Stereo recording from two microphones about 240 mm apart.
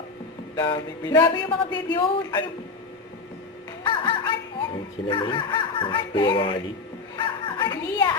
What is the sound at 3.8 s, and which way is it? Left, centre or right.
A woman's voice, left.